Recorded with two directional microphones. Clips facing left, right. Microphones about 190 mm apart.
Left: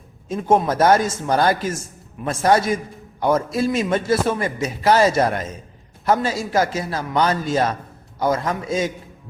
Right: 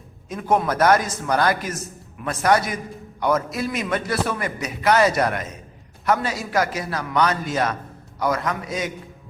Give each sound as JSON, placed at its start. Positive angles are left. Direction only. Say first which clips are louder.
{"t": 0.3, "sound": "a man's voice", "louder": "left 3 dB", "side_deg": 25}